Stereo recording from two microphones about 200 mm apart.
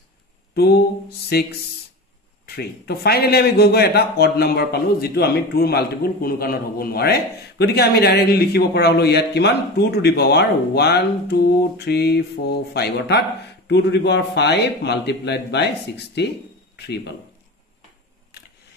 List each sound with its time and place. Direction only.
0.6 s a man's voice: 50° left (ahead or behind)